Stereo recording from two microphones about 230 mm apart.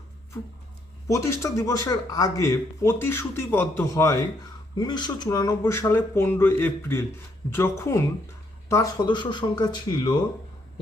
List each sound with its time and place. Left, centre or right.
1.0 s speech: centre